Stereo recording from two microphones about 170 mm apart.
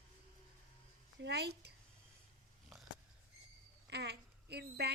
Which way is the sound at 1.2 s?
80° right.